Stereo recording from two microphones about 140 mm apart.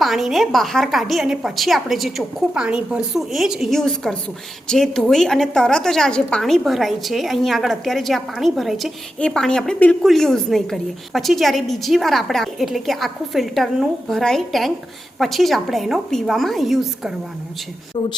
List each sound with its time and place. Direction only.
0.0 s a woman's voice: centre (ahead or behind)